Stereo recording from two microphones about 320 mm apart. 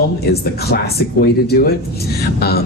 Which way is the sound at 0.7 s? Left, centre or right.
Left.